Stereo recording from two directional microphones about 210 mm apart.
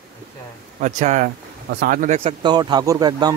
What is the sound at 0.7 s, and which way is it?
Speech, 35° right (ahead or behind).